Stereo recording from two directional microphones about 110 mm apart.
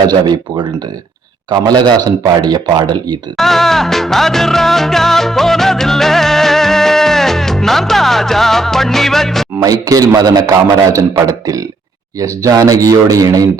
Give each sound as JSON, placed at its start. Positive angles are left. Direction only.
{"t": 0.1, "sound": "a man's voice", "side_deg": -40}
{"t": 3.3, "sound": "music", "side_deg": 0}
{"t": 9.6, "sound": "a man's voice", "side_deg": -30}